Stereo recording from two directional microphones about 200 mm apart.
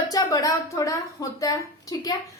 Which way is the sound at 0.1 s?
15° left (ahead or behind).